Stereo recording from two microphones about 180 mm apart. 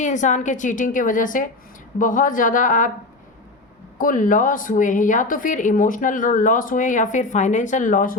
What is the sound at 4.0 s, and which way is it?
A woman's voice, 50° left (ahead or behind).